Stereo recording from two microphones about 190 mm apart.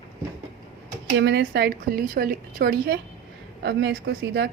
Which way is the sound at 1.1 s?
60° right (ahead or behind).